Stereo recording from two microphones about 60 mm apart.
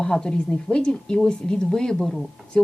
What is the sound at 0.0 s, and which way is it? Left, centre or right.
A woman's voice, centre.